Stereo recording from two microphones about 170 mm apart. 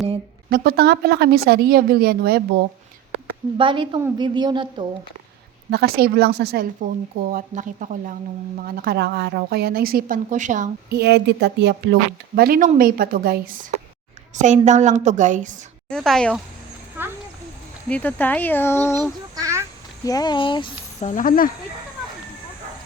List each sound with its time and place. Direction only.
0.5 s a woman's voice: 65° right (ahead or behind)
3.6 s a woman's voice: 30° right (ahead or behind)
5.7 s a woman's voice: 65° right (ahead or behind)
7.3 s a woman's voice: 55° right (ahead or behind)
8.5 s a woman's voice: 60° right (ahead or behind)
10.9 s speech: 75° right (ahead or behind)
12.4 s a woman's voice: 55° right (ahead or behind)
14.3 s a woman's voice: 45° right (ahead or behind)
15.9 s a woman's voice: 5° left (ahead or behind)
17.8 s speech: 10° left (ahead or behind)
19.4 s a sound: 15° right (ahead or behind)
20.1 s speech: 25° left (ahead or behind)
21.0 s speech: 50° left (ahead or behind)